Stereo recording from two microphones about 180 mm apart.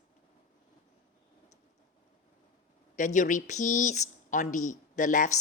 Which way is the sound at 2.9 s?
45° left (ahead or behind).